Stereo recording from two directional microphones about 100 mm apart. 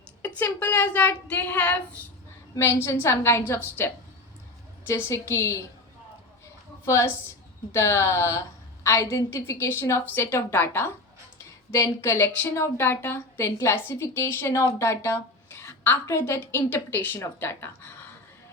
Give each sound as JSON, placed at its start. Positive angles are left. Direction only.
{"t": 0.2, "sound": "speech", "side_deg": 20}
{"t": 2.6, "sound": "speech", "side_deg": 25}
{"t": 4.9, "sound": "speech", "side_deg": 30}
{"t": 6.8, "sound": "a woman's voice", "side_deg": 30}